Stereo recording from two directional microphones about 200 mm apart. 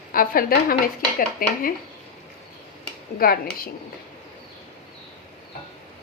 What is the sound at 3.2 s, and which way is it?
Speech, 50° left (ahead or behind).